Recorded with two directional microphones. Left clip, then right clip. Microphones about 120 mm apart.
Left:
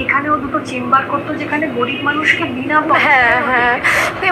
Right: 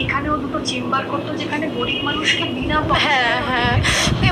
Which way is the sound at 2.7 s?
25° left (ahead or behind).